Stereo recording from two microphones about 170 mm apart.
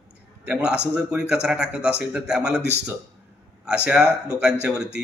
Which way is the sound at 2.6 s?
80° right.